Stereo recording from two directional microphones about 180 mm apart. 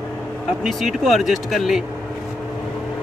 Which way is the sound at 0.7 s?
Centre (ahead or behind).